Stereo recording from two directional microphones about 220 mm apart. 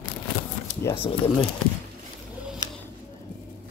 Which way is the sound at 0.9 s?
25° left (ahead or behind).